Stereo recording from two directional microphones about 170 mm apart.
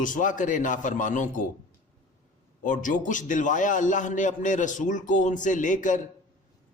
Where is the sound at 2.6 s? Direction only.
50° left (ahead or behind).